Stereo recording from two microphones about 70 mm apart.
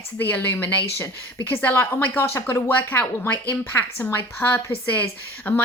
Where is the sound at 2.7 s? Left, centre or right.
Left.